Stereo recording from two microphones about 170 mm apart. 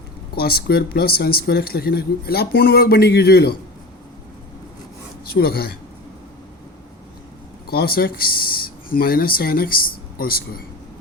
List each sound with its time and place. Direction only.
0.3 s speech: 65° left (ahead or behind)
5.2 s speech: 65° left (ahead or behind)
7.7 s speech: 60° left (ahead or behind)